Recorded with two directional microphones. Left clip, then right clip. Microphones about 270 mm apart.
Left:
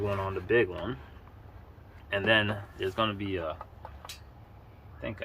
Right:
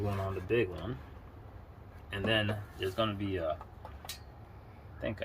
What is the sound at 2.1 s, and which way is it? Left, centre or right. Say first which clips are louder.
Speech: left 6 dB; centre.